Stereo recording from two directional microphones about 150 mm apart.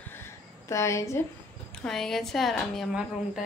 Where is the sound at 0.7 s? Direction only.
20° left (ahead or behind).